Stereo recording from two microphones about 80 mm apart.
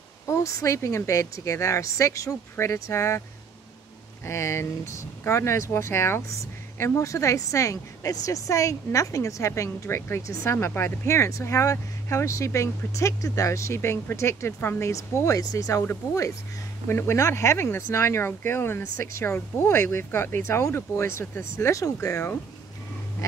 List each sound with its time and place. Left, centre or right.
0.3 s speech: left
4.3 s speech: left
9.6 s speech: left
16.8 s speech: left